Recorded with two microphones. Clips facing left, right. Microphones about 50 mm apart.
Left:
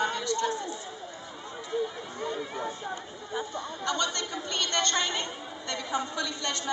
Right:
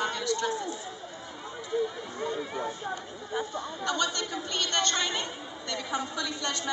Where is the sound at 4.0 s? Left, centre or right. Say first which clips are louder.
Right 1 dB; left.